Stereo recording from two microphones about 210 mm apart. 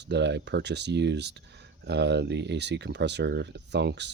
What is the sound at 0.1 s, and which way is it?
Speech, 55° right (ahead or behind).